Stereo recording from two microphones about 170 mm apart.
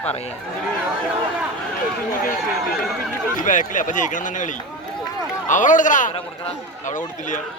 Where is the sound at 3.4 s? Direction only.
50° left (ahead or behind).